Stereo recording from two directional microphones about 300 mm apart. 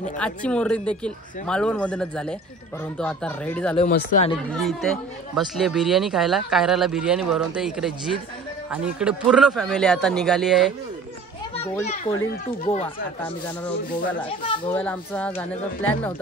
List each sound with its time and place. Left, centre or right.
0.2 s speech: centre
3.9 s speech: left
4.6 s speech: centre
11.8 s speech: left
14.5 s speech: centre
14.8 s speech: centre